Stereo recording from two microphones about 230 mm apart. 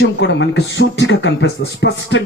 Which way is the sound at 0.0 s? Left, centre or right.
Left.